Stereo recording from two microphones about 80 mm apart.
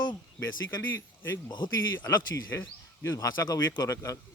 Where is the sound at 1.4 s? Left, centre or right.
Left.